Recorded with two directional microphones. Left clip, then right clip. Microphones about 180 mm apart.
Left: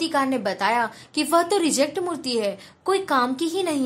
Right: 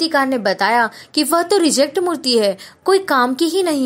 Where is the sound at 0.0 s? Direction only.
30° right (ahead or behind).